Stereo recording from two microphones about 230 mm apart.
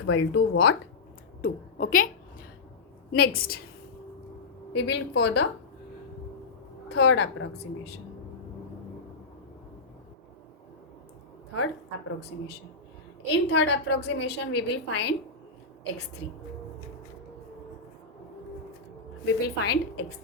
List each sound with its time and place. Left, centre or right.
0.0 s a woman's voice: left
1.4 s a woman's voice: left
3.1 s a woman's voice: left
4.7 s a woman's voice: left
6.9 s a woman's voice: left
11.5 s a woman's voice: left
19.2 s a woman's voice: left